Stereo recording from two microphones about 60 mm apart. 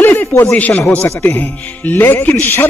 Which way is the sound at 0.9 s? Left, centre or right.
Left.